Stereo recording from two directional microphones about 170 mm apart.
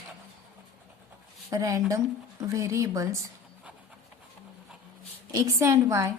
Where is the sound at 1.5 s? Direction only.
20° right (ahead or behind).